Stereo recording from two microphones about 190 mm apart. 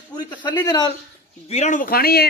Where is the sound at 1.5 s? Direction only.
40° left (ahead or behind).